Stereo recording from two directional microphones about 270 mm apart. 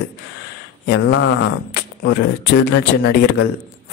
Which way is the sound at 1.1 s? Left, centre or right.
Left.